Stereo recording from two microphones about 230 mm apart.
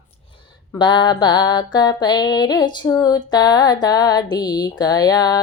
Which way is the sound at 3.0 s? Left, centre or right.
Centre.